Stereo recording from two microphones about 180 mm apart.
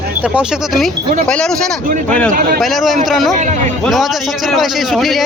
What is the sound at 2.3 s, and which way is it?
Speech, 50° right (ahead or behind).